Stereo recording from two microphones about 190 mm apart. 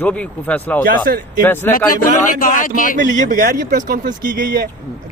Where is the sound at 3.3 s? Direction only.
45° right (ahead or behind).